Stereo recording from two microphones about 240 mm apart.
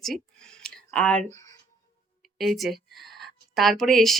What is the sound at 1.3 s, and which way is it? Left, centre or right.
Speech, right.